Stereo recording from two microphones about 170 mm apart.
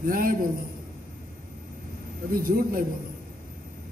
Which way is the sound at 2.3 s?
60° right (ahead or behind).